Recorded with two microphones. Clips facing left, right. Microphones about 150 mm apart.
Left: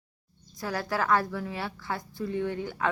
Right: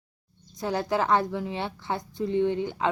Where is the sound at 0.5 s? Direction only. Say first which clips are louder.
Right 4 dB; 25° right (ahead or behind).